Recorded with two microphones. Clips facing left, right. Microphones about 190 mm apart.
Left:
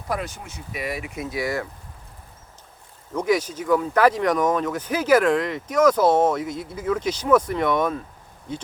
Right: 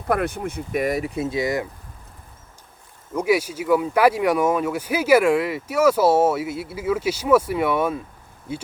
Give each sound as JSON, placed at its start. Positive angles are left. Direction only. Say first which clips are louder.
{"t": 0.1, "sound": "speech", "louder": "right 7 dB", "side_deg": -55}
{"t": 3.2, "sound": "speech", "louder": "right 1 dB", "side_deg": -10}